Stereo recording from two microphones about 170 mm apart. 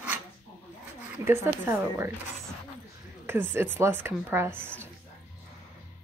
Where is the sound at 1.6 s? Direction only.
15° right (ahead or behind).